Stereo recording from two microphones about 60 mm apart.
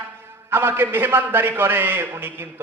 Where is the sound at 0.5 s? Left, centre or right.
Right.